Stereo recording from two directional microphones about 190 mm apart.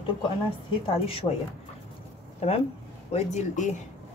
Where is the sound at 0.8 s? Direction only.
30° left (ahead or behind).